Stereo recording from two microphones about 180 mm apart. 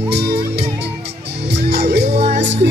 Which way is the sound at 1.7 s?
70° right (ahead or behind).